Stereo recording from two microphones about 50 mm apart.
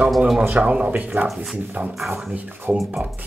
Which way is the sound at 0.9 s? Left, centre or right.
Right.